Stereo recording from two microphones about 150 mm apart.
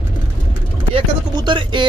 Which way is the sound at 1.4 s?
30° right (ahead or behind).